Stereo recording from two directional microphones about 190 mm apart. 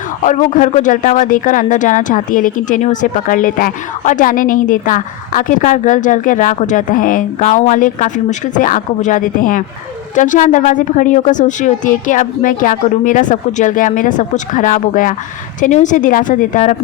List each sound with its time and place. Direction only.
0.2 s speech: 45° left (ahead or behind)